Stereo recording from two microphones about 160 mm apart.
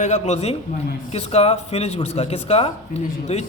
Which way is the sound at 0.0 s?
45° left (ahead or behind).